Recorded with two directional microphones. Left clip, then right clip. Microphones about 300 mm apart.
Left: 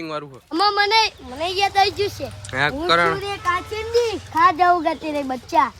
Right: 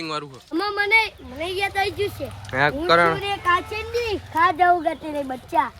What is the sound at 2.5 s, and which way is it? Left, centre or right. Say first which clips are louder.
Speech: right 1 dB; centre.